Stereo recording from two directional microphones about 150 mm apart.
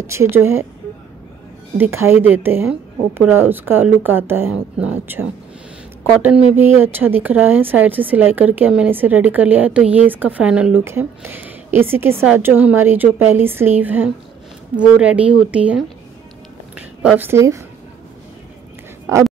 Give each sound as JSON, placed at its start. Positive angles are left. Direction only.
{"t": 0.0, "sound": "a woman's voice", "side_deg": -20}
{"t": 1.8, "sound": "a woman's voice", "side_deg": -15}
{"t": 6.2, "sound": "a woman's voice", "side_deg": -10}
{"t": 17.3, "sound": "a woman's voice", "side_deg": -20}
{"t": 19.1, "sound": "speech", "side_deg": -20}